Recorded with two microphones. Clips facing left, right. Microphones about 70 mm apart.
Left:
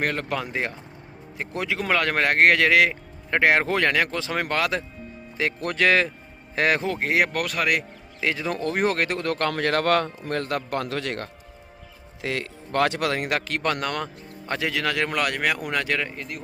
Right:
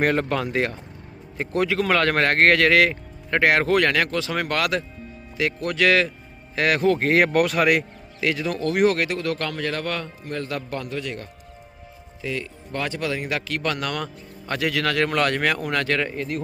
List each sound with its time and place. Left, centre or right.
0.0 s speech: centre
0.3 s speech: centre
1.5 s speech: centre
6.8 s speech: centre
8.2 s speech: left
9.5 s a man's voice: left
10.8 s a man's voice: left
12.2 s a man's voice: left
13.6 s speech: left; by 16.0 s centre
16.0 s speech: centre